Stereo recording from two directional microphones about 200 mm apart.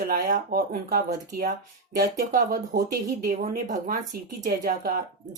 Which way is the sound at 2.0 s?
40° right (ahead or behind).